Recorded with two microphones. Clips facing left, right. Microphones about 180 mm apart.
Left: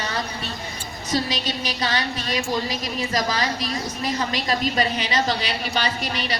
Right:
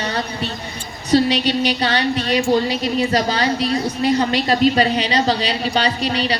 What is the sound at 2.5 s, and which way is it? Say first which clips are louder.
A woman's voice: right 8 dB; 30° right (ahead or behind).